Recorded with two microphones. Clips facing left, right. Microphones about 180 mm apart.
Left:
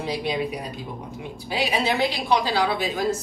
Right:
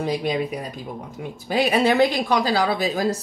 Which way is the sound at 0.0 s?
45° right (ahead or behind).